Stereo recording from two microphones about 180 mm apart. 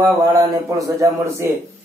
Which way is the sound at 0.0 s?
20° right (ahead or behind).